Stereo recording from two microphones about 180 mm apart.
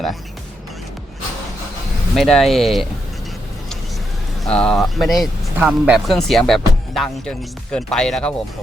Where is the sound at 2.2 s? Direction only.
Centre (ahead or behind).